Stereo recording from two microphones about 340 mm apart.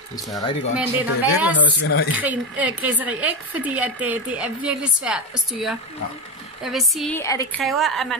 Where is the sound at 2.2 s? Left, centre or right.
Centre.